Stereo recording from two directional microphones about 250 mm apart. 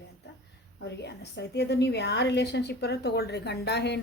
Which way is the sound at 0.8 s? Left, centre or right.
Left.